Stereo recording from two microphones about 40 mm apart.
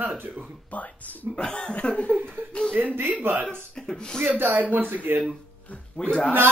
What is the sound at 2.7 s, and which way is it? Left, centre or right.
Speech, right.